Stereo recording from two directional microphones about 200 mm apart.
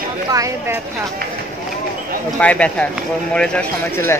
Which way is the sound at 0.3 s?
15° right (ahead or behind).